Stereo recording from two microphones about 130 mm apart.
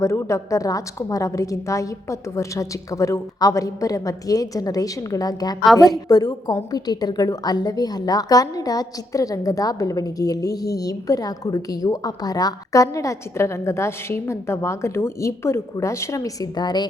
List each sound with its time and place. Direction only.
0.0 s a woman's voice: 25° left (ahead or behind)